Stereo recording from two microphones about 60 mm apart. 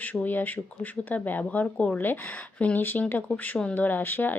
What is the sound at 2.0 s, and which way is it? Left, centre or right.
Speech, left.